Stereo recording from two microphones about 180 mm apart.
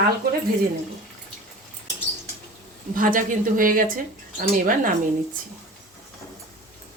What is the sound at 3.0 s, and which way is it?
A woman's voice, 50° right (ahead or behind).